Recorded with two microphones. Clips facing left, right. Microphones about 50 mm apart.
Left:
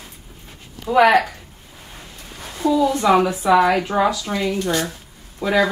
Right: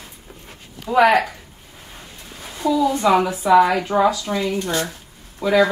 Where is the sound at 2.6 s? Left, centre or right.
Left.